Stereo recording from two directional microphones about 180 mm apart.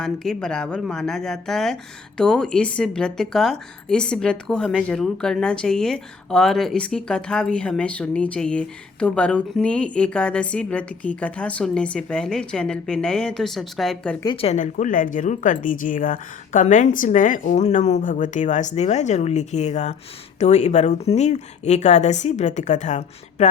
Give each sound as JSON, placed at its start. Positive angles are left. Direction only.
{"t": 0.0, "sound": "speech", "side_deg": 5}
{"t": 14.4, "sound": "speech", "side_deg": 40}